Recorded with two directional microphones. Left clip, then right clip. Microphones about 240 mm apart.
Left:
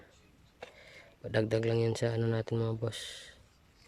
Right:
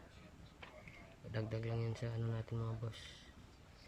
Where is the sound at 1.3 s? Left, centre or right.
Left.